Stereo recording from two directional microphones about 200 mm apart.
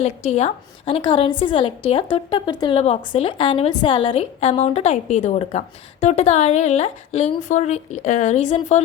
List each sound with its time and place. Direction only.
0.0 s a woman's voice: 35° left (ahead or behind)